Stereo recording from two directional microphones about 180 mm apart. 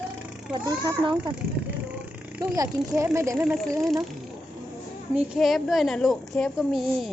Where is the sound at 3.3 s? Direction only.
Centre (ahead or behind).